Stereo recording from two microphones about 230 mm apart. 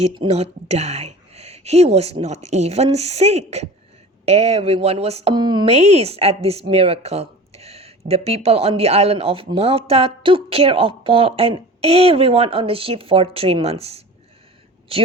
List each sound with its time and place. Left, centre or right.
0.0 s speech: right